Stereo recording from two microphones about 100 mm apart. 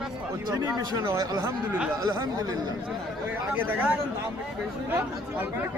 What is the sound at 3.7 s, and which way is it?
Speech, 20° right (ahead or behind).